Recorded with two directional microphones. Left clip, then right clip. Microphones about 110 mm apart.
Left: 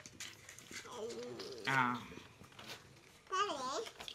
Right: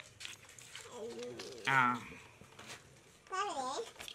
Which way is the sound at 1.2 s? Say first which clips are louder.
Right 2 dB; 5° right (ahead or behind).